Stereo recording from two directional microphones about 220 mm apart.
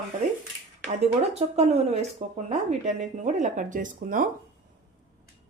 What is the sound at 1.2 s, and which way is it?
Speech, 30° right (ahead or behind).